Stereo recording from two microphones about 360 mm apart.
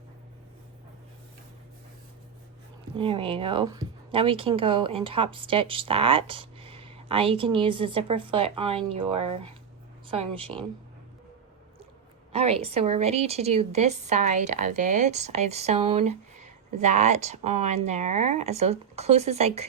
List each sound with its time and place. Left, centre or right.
2.9 s speech: centre
12.3 s speech: centre